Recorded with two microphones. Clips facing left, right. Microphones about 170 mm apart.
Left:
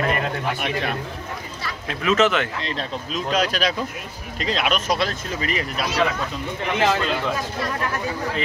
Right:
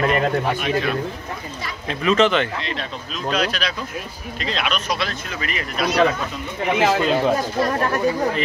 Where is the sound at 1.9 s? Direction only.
5° left (ahead or behind).